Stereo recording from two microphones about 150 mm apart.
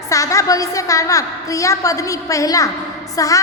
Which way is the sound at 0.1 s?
20° left (ahead or behind).